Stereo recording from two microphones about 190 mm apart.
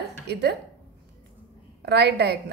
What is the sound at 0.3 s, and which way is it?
Speech, 60° right (ahead or behind).